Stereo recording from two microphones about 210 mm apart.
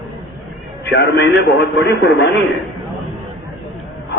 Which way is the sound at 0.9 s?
55° left (ahead or behind).